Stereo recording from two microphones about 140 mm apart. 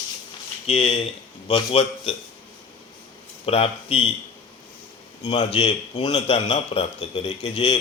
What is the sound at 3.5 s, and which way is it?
Speech, 45° left (ahead or behind).